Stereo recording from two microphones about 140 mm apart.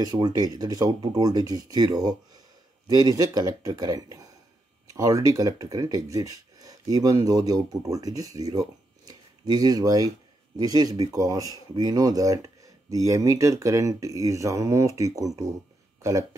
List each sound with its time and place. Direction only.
0.0 s speech: 30° right (ahead or behind)